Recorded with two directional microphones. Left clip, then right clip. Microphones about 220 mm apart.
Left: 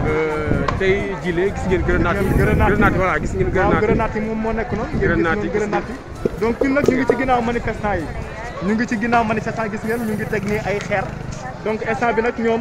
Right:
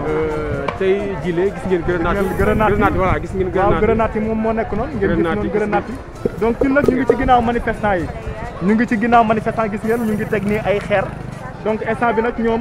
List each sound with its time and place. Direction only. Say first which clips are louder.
0.1 s speech: left 1 dB; centre (ahead or behind)
2.1 s speech: right 2 dB; 35° right (ahead or behind)
2.7 s speech: right 1 dB; 15° right (ahead or behind)
3.8 s speech: right 3 dB; 35° right (ahead or behind)
5.1 s speech: left 2 dB; 5° right (ahead or behind)
6.4 s speech: right 2 dB; 30° right (ahead or behind)
11.6 s speech: right 2 dB; 30° right (ahead or behind)